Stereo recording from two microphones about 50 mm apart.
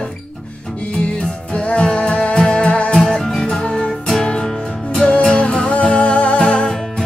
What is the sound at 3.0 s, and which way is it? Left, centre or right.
Music, centre.